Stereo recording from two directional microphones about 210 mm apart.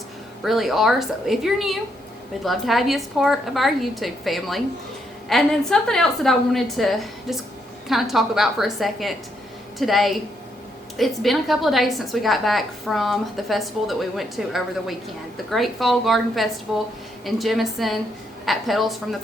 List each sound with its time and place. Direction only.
0.4 s a woman's voice: centre (ahead or behind)